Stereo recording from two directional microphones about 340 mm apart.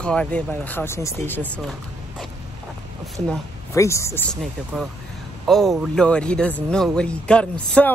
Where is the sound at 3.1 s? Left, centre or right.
Centre.